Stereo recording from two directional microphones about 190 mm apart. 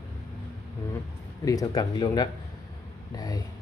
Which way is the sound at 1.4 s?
20° left (ahead or behind).